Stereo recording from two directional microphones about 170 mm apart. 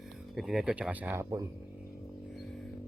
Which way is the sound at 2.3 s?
Centre (ahead or behind).